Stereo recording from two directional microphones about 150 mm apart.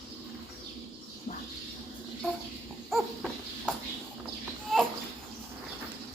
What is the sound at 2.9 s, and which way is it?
Dog, centre (ahead or behind).